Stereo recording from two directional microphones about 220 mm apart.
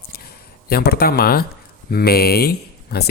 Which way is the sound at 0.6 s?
45° left (ahead or behind).